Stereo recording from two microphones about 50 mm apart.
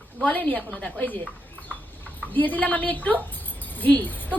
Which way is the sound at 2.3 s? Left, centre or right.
Left.